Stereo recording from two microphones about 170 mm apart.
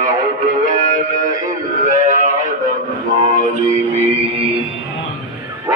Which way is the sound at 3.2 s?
45° right (ahead or behind).